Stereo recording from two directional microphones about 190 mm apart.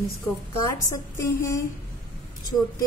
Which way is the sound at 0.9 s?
15° left (ahead or behind).